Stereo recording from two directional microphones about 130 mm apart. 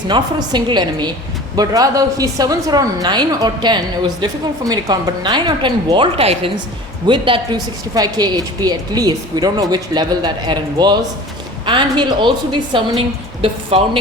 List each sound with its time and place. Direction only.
0.1 s a woman's voice: 35° right (ahead or behind)